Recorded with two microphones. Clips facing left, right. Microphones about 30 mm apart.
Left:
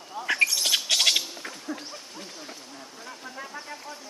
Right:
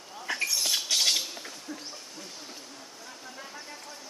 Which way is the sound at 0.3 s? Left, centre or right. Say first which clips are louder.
Left 6 dB; left.